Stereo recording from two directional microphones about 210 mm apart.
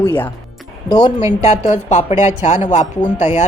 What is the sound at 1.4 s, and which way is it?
Speech, 35° left (ahead or behind).